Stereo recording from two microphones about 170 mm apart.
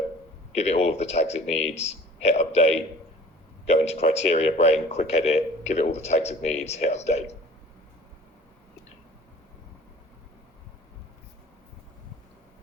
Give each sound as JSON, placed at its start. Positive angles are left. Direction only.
{"t": 0.5, "sound": "speech", "side_deg": 40}